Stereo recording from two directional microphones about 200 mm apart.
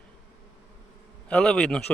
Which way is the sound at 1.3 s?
5° left (ahead or behind).